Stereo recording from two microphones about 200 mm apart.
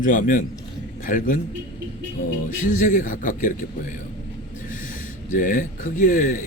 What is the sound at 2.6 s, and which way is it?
Speech, 40° left (ahead or behind).